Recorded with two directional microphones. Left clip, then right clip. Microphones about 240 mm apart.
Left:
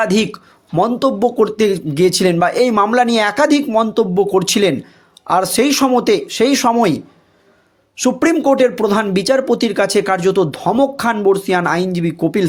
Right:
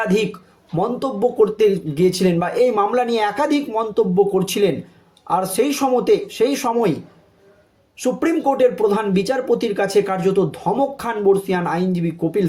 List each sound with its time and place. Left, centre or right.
0.0 s speech: left
7.9 s speech: left